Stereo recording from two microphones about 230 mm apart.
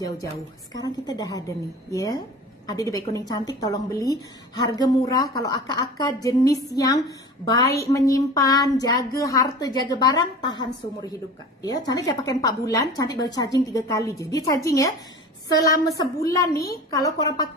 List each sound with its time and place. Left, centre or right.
0.7 s a woman's voice: centre